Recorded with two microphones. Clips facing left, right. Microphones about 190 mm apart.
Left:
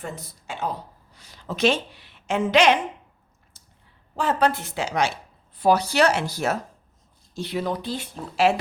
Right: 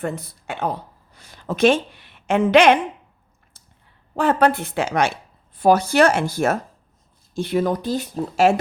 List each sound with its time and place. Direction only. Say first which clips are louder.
0.0 s speech: right 8 dB; 60° right (ahead or behind)
3.6 s a sound: right 2 dB; 55° right (ahead or behind)
4.1 s speech: right 5 dB; 55° right (ahead or behind)